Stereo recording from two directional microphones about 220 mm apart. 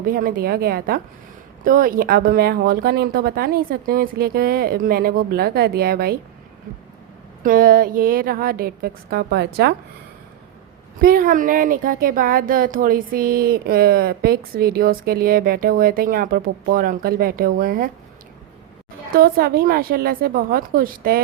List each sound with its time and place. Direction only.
0.0 s speech: 40° right (ahead or behind)
7.4 s speech: 40° right (ahead or behind)
11.0 s speech: 40° right (ahead or behind)
19.1 s speech: 40° right (ahead or behind)